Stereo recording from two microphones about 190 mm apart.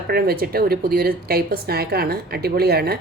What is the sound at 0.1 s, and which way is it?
A woman's voice, 55° right (ahead or behind).